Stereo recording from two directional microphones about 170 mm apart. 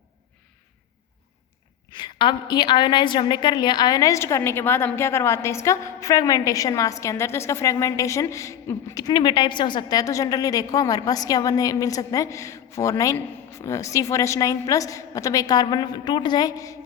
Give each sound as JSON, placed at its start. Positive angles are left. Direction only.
{"t": 2.0, "sound": "a woman's voice", "side_deg": 25}